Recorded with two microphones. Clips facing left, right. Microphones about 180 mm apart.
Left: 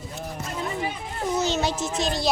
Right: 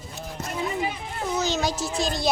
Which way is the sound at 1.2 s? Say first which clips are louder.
Left 2 dB; 10° left (ahead or behind).